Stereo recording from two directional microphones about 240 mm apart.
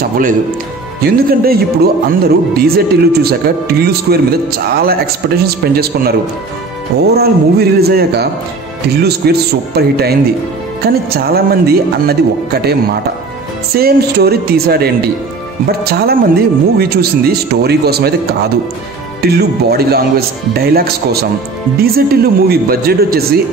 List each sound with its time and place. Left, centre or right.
1.0 s speech: right
7.2 s speech: right
13.7 s speech: right
19.2 s speech: right